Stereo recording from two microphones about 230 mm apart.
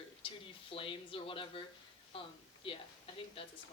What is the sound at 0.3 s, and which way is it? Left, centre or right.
Speech, left.